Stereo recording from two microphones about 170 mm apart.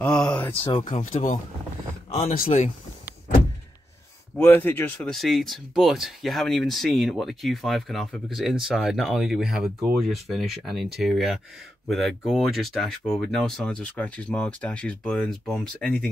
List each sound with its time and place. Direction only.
0.0 s a sound: 5° left (ahead or behind)
0.8 s speech: 45° left (ahead or behind)
2.2 s speech: 55° left (ahead or behind)
4.4 s speech: 10° left (ahead or behind)